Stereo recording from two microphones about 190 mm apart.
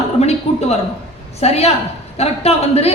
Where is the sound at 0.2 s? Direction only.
35° left (ahead or behind).